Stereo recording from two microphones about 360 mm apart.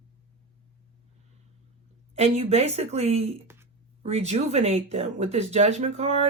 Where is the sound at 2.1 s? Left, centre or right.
Centre.